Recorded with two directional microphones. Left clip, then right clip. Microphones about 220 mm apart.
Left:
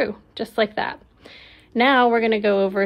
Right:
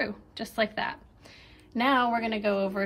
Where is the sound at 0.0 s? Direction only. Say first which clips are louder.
Left 8 dB; 25° left (ahead or behind).